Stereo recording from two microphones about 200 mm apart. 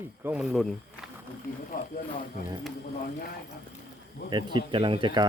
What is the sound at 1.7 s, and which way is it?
Speech, 45° left (ahead or behind).